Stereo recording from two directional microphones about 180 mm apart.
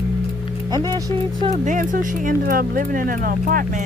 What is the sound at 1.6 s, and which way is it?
Speech, 45° right (ahead or behind).